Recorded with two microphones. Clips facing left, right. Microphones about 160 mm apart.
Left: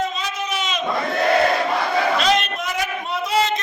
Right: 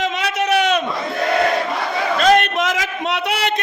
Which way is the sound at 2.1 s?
50° right (ahead or behind).